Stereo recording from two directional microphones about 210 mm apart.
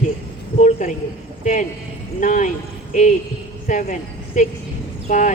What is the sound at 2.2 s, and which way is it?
Speech, 35° left (ahead or behind).